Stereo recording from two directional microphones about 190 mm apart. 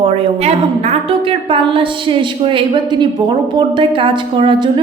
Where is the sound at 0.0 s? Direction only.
30° right (ahead or behind).